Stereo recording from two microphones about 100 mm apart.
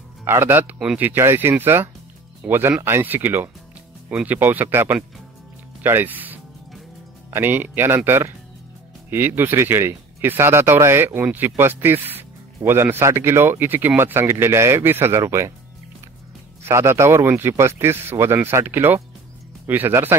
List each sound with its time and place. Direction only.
0.2 s speech: 25° right (ahead or behind)
16.6 s speech: 25° right (ahead or behind)